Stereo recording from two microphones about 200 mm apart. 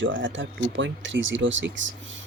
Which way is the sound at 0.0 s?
70° right (ahead or behind).